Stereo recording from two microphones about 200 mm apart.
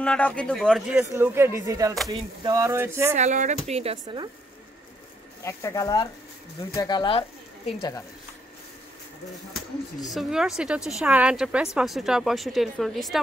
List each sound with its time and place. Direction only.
0.0 s a woman's voice: 5° left (ahead or behind); by 2.0 s 15° right (ahead or behind)
2.0 s a sound: 20° right (ahead or behind)
3.2 s a woman's voice: 35° right (ahead or behind)
5.4 s speech: 15° left (ahead or behind)
10.0 s a woman's voice: centre (ahead or behind)